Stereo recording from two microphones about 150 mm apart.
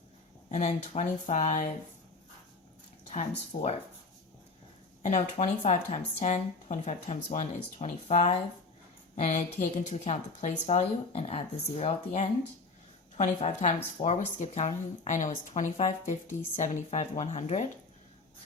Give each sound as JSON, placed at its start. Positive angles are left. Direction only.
{"t": 0.5, "sound": "speech", "side_deg": 50}
{"t": 3.1, "sound": "speech", "side_deg": 45}
{"t": 5.0, "sound": "speech", "side_deg": 50}